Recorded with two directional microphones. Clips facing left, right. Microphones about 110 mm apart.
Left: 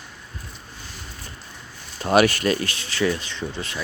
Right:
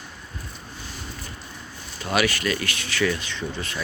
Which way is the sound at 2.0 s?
45° left (ahead or behind).